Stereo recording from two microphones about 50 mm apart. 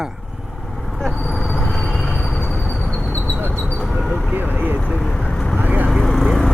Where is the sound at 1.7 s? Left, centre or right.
Centre.